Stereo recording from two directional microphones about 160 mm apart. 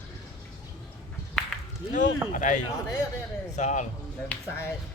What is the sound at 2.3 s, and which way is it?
Speech, 50° left (ahead or behind).